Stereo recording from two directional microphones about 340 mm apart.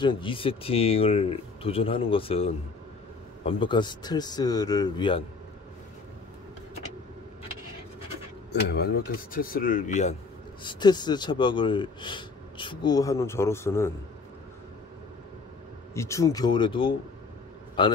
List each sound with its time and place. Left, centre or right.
0.0 s speech: centre
8.5 s a man's voice: left; by 13.9 s centre
15.9 s speech: centre